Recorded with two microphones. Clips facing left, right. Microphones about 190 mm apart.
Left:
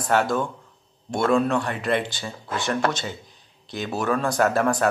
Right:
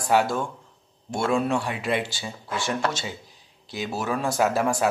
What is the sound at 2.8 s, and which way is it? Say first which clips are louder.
Speech: left 4 dB; 55° left (ahead or behind).